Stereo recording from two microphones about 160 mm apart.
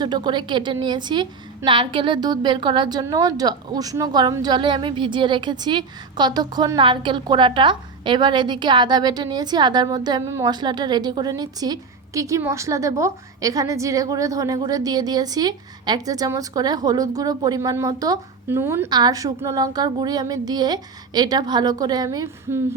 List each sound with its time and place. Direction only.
0.0 s a woman's voice: 30° right (ahead or behind)
18.9 s a woman's voice: 25° right (ahead or behind)